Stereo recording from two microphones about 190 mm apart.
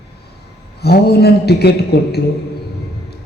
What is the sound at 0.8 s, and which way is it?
A man's voice, 55° left (ahead or behind).